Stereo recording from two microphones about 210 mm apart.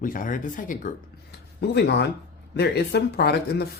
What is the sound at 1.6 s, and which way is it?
Speech, 55° left (ahead or behind).